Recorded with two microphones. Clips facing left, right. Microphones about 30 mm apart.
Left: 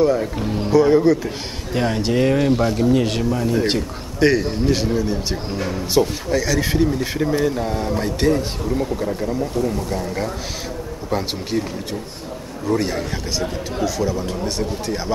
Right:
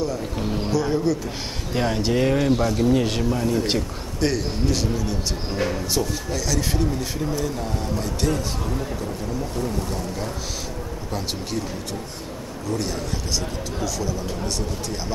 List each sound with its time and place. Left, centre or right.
0.0 s speech: left
0.4 s speech: centre
0.7 s speech: left
1.7 s speech: centre; by 11.6 s left
12.6 s speech: left